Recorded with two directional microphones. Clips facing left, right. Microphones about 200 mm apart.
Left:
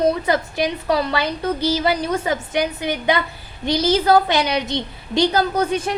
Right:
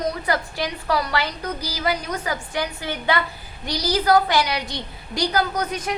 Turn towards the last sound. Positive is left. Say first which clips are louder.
# left 5 dB
turn(degrees=30)  # may be behind; listen again after turning